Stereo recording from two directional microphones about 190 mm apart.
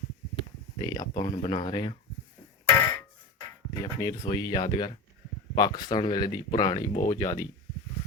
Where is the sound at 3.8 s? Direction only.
20° left (ahead or behind).